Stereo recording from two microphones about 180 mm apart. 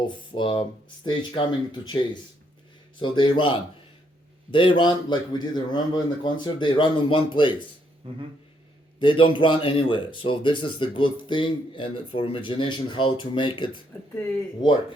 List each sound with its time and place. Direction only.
0.1 s speech: 25° left (ahead or behind)
3.0 s speech: 25° left (ahead or behind)
8.0 s speech: 30° right (ahead or behind)
9.0 s speech: 30° left (ahead or behind)